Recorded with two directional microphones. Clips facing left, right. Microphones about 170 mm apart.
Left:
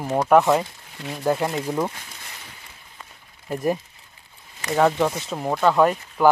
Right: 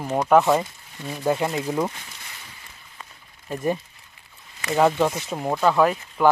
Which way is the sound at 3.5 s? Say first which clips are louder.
Left 1 dB; 5° left (ahead or behind).